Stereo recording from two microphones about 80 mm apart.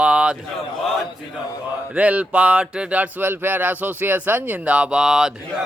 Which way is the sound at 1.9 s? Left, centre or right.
Centre.